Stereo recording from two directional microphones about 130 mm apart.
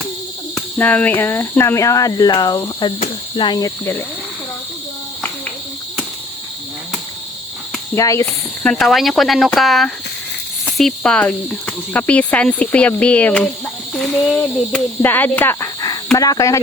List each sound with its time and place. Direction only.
0.5 s speech: 10° left (ahead or behind); by 3.7 s 35° left (ahead or behind)
7.9 s speech: 25° left (ahead or behind)
8.6 s speech: centre (ahead or behind); by 16.6 s 25° left (ahead or behind)